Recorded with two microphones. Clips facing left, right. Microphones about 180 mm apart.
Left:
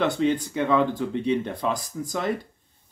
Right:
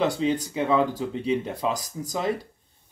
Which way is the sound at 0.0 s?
35° right (ahead or behind).